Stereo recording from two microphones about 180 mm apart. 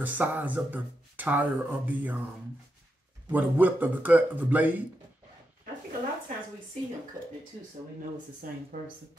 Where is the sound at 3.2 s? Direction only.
10° right (ahead or behind).